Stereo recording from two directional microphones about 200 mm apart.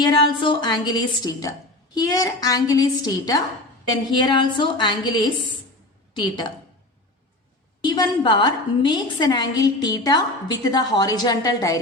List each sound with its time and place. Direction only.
0.0 s a woman's voice: 25° left (ahead or behind)
7.9 s a woman's voice: 20° left (ahead or behind)